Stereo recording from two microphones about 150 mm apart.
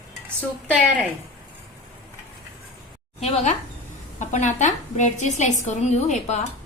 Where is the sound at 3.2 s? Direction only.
45° left (ahead or behind).